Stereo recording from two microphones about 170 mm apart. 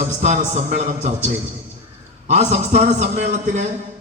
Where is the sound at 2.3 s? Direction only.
40° right (ahead or behind).